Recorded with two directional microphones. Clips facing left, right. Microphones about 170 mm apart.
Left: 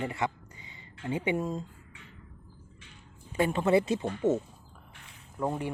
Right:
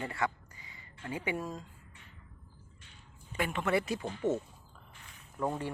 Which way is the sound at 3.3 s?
30° left (ahead or behind).